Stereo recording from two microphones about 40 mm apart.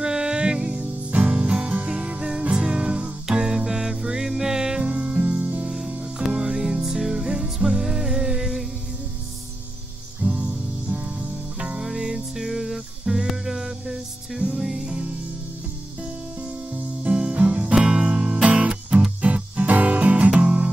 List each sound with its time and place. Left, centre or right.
0.0 s music: centre
4.8 s music: right
6.3 s music: centre
10.2 s music: right
11.8 s music: centre
17.1 s music: right
17.7 s music: right